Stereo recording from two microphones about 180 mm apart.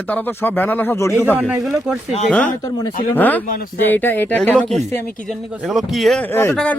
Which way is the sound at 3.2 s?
10° left (ahead or behind).